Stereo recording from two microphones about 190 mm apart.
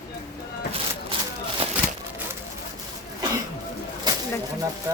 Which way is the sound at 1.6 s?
30° right (ahead or behind).